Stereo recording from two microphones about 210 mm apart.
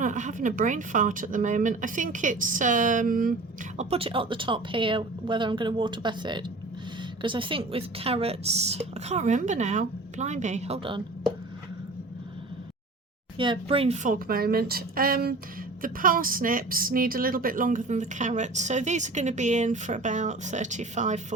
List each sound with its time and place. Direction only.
0.0 s a woman's voice: 35° right (ahead or behind)
3.8 s a woman's voice: 30° right (ahead or behind)
13.3 s a woman's voice: 25° right (ahead or behind)